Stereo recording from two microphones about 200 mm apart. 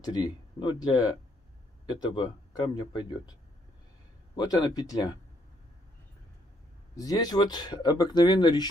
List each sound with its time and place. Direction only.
0.0 s speech: 20° left (ahead or behind)
4.4 s speech: 20° left (ahead or behind)
7.0 s speech: 20° left (ahead or behind)